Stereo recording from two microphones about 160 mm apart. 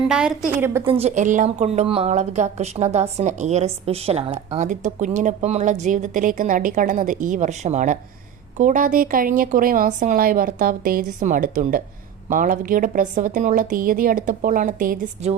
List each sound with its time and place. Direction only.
0.1 s a woman's voice: 5° right (ahead or behind)
0.9 s a woman's voice: 40° right (ahead or behind); by 14.9 s 60° right (ahead or behind)